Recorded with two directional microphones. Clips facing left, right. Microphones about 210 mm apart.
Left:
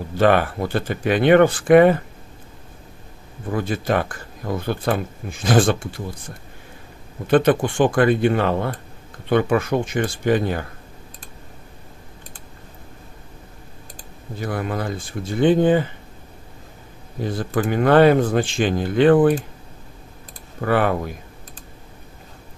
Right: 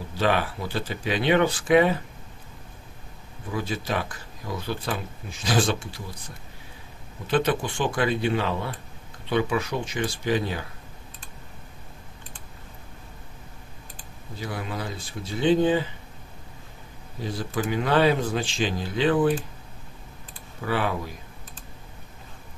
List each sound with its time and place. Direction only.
0.2 s speech: 55° left (ahead or behind)
3.4 s speech: 55° left (ahead or behind)
14.4 s speech: 50° left (ahead or behind)
17.2 s speech: 55° left (ahead or behind)
20.6 s speech: 55° left (ahead or behind)